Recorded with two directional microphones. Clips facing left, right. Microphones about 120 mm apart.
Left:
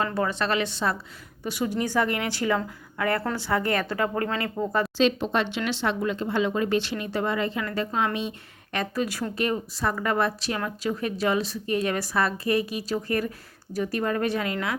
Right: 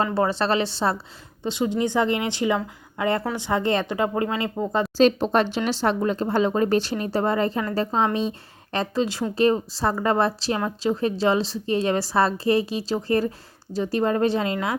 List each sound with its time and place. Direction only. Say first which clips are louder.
0.0 s a woman's voice: right 4 dB; 30° right (ahead or behind)
4.9 s a woman's voice: right 6 dB; 40° right (ahead or behind)